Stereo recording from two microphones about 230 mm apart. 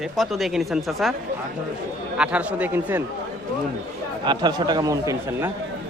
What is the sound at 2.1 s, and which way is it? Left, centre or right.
Speech, centre.